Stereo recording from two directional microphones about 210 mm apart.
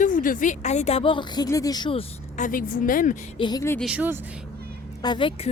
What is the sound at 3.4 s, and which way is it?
Speech, 20° left (ahead or behind).